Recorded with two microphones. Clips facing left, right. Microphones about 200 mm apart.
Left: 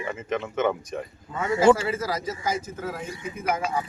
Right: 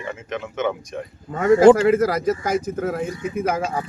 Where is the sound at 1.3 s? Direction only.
65° right (ahead or behind).